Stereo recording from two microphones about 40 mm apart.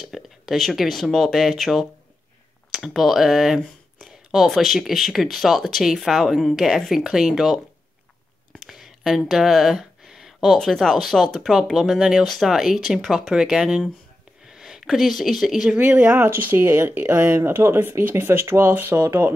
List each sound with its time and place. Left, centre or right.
0.0 s speech: centre
8.5 s a sound: centre
9.3 s speech: centre
14.4 s a sound: centre
15.2 s speech: centre
15.8 s speech: right
16.2 s speech: right